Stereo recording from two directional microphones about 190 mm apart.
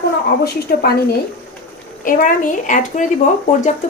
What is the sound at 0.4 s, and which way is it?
Speech, 55° left (ahead or behind).